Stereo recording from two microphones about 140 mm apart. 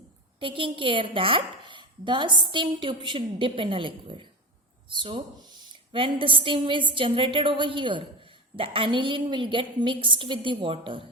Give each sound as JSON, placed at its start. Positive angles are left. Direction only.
{"t": 0.3, "sound": "a woman's voice", "side_deg": -40}